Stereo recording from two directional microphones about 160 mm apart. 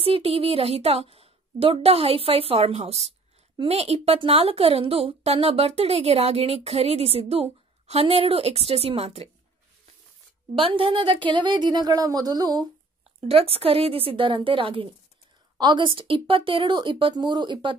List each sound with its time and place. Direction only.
0.0 s a woman's voice: 35° right (ahead or behind)
10.6 s speech: 35° right (ahead or behind)
13.2 s a woman's voice: 40° right (ahead or behind)